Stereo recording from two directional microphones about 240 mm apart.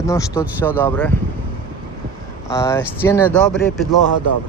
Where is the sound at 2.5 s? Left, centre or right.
Centre.